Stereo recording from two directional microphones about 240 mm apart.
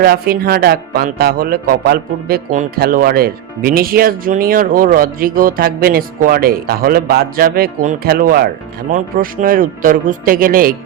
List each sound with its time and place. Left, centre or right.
0.0 s a man's voice: right